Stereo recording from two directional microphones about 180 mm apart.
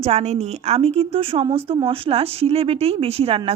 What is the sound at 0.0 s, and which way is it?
Speech, 35° right (ahead or behind).